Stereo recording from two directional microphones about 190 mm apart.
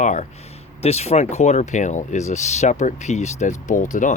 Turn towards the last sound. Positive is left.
turn(degrees=40)  # may be behind; listen again after turning